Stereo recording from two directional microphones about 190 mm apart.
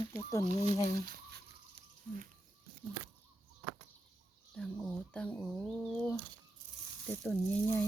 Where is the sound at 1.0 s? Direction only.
55° right (ahead or behind).